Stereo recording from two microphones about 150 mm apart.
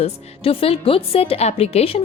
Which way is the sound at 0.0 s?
40° left (ahead or behind).